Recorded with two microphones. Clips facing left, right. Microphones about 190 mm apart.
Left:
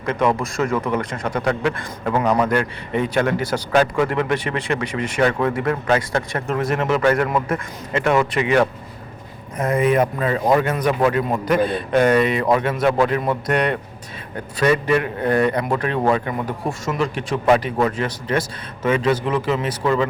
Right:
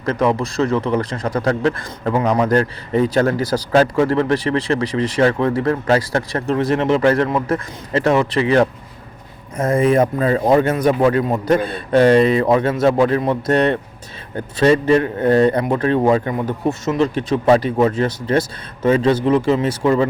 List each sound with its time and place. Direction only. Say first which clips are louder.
0.0 s speech: right 2 dB; 35° right (ahead or behind)
2.1 s a man's voice: right 1 dB; 25° right (ahead or behind)
2.5 s speech: right 4 dB; 35° right (ahead or behind)
9.7 s a man's voice: right 3 dB; 35° right (ahead or behind)